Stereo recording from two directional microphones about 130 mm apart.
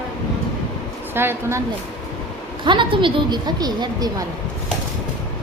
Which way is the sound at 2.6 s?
40° right (ahead or behind).